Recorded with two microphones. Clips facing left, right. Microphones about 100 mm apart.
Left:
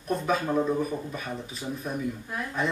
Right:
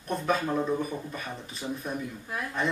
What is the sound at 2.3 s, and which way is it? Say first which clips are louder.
Speech: right 1 dB; centre (ahead or behind).